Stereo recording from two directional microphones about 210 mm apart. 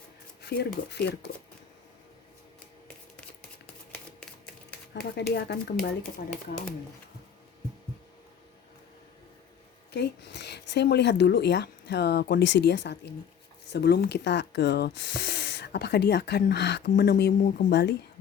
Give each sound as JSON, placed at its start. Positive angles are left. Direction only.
{"t": 0.4, "sound": "speech", "side_deg": 50}
{"t": 4.9, "sound": "speech", "side_deg": 50}
{"t": 9.9, "sound": "speech", "side_deg": 55}